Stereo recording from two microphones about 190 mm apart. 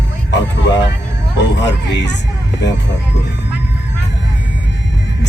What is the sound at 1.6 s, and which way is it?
Speech, 65° left (ahead or behind).